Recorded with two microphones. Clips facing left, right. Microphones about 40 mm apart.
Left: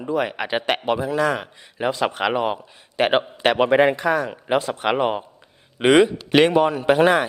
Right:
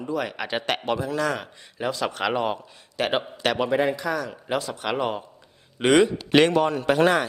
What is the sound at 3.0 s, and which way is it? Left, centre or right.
Speech, left.